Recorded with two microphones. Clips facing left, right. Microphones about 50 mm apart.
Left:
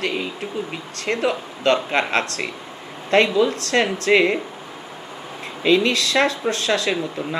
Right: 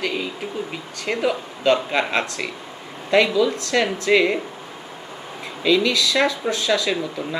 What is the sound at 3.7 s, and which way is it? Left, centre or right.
Speech, left.